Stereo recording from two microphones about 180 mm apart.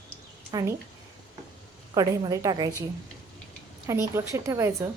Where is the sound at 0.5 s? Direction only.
15° right (ahead or behind).